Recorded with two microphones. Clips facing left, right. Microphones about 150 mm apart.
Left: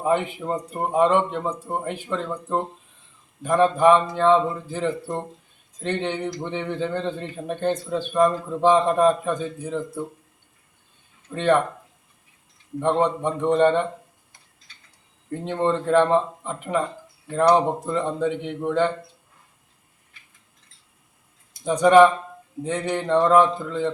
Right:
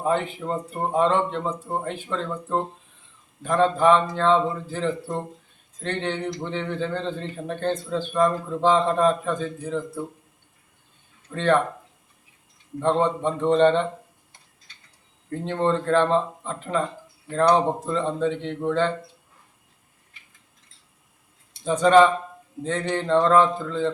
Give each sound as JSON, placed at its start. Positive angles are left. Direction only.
{"t": 0.0, "sound": "a man's voice", "side_deg": 15}
{"t": 11.3, "sound": "a man's voice", "side_deg": 15}
{"t": 12.8, "sound": "a man's voice", "side_deg": 15}
{"t": 15.3, "sound": "a man's voice", "side_deg": 15}
{"t": 21.6, "sound": "a man's voice", "side_deg": 15}